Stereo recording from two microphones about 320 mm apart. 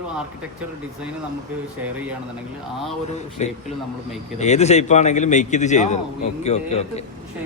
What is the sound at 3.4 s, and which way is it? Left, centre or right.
A man's voice, left.